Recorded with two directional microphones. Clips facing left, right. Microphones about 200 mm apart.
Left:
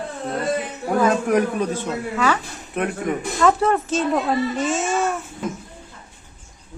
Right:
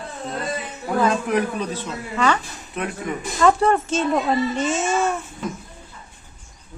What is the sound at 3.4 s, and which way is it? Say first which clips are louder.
Speech: right 1 dB; centre (ahead or behind).